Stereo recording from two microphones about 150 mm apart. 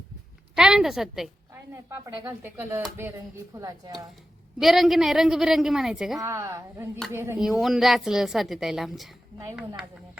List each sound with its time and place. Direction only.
0.5 s a woman's voice: 5° right (ahead or behind)
1.7 s a woman's voice: 15° right (ahead or behind)
4.6 s a woman's voice: centre (ahead or behind)
6.2 s speech: 15° right (ahead or behind)
7.3 s a woman's voice: 5° right (ahead or behind)